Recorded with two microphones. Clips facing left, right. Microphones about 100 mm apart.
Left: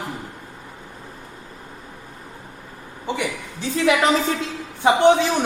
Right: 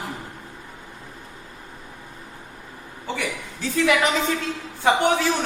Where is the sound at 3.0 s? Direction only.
20° left (ahead or behind).